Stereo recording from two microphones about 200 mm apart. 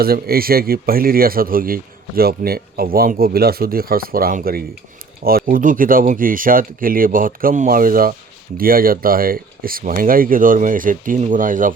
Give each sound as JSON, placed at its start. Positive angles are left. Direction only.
{"t": 0.0, "sound": "speech", "side_deg": -50}